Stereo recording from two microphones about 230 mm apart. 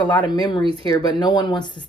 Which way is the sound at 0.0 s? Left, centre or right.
Centre.